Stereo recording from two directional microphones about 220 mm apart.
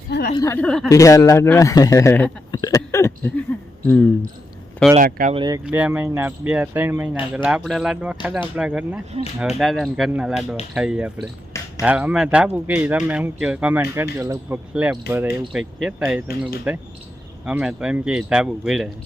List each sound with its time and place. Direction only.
0.1 s a sound: 45° left (ahead or behind)
0.3 s speech: 10° left (ahead or behind)
0.9 s speech: 15° left (ahead or behind)
4.9 s speech: 40° right (ahead or behind)
5.3 s speech: 20° right (ahead or behind)
5.6 s speech: 5° right (ahead or behind)